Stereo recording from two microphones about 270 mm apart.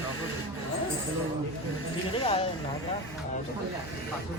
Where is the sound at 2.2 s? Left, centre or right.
Left.